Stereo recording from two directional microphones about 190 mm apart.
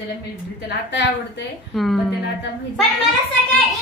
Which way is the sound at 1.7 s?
Centre (ahead or behind).